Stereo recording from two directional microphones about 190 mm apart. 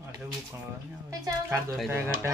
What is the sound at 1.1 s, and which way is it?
Speech, 15° right (ahead or behind).